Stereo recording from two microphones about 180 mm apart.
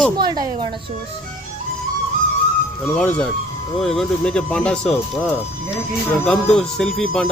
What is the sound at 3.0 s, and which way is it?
Speech, 5° left (ahead or behind).